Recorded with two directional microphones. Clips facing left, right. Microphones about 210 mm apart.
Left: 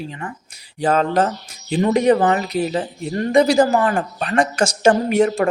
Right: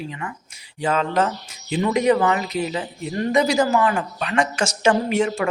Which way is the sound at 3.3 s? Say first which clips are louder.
Left 5 dB; 30° left (ahead or behind).